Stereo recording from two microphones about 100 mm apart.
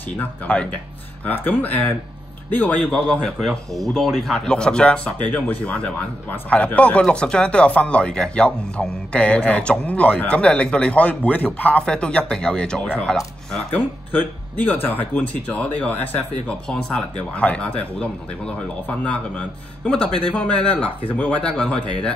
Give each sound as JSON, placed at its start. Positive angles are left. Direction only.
{"t": 0.1, "sound": "speech", "side_deg": 15}